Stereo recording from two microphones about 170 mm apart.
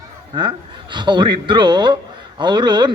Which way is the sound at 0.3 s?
25° right (ahead or behind).